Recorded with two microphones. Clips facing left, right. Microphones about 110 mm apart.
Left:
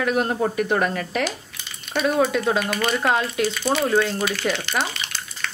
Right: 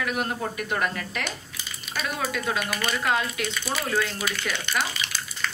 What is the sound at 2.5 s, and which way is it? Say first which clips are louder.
Speech: left 6 dB; centre (ahead or behind).